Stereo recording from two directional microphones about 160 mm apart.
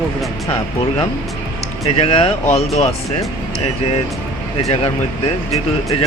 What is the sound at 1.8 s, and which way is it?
A man's voice, 40° left (ahead or behind).